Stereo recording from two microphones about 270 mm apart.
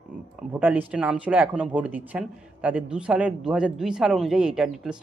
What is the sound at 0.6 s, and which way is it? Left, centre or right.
A man's voice, centre.